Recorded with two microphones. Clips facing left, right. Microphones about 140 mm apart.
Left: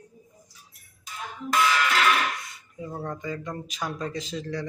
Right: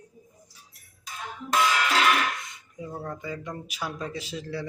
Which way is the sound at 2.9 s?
Centre (ahead or behind).